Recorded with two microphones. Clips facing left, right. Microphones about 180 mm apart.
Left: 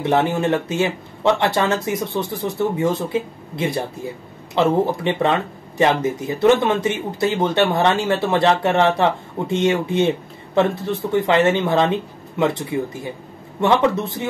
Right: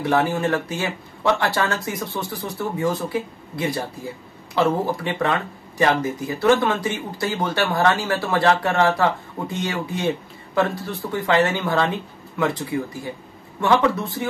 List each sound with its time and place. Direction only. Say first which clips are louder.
0.0 s speech: left 2 dB; 25° left (ahead or behind)